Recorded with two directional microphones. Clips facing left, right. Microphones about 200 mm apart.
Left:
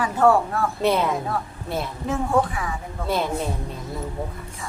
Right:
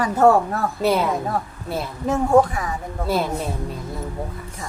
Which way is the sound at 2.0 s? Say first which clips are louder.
Right 6 dB; 40° right (ahead or behind).